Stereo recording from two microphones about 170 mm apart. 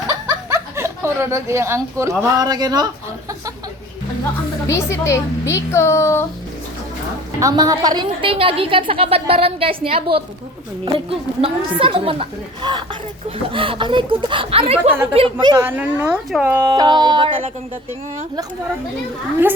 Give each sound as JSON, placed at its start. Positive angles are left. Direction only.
{"t": 0.1, "sound": "speech", "side_deg": -20}
{"t": 4.7, "sound": "a woman's voice", "side_deg": 15}
{"t": 7.3, "sound": "a woman's voice", "side_deg": -20}
{"t": 15.5, "sound": "speech", "side_deg": -10}
{"t": 16.7, "sound": "speech", "side_deg": -25}